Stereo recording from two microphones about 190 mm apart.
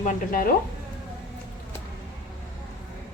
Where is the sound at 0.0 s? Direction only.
45° left (ahead or behind).